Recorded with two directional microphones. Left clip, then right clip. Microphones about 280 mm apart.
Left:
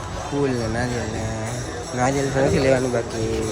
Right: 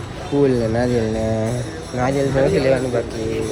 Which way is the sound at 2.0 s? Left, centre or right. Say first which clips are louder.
Right 3 dB; centre.